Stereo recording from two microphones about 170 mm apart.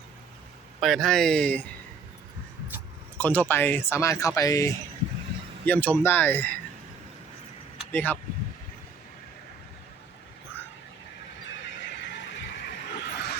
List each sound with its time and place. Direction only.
0.8 s speech: centre (ahead or behind)
3.2 s speech: 10° left (ahead or behind)
7.9 s speech: 10° left (ahead or behind)
12.0 s a sound: 90° left